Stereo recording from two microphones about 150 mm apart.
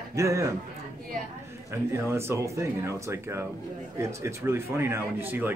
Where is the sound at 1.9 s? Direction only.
15° right (ahead or behind).